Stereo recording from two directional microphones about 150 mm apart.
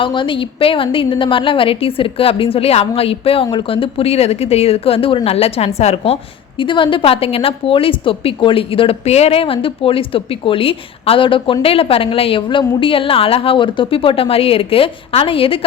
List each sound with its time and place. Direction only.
0.0 s a woman's voice: 35° left (ahead or behind)
6.6 s a woman's voice: 35° left (ahead or behind)